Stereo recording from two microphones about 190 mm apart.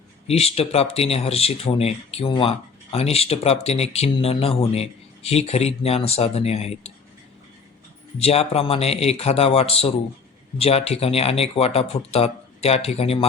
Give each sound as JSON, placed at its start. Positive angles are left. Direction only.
{"t": 0.3, "sound": "speech", "side_deg": 35}
{"t": 8.2, "sound": "speech", "side_deg": 30}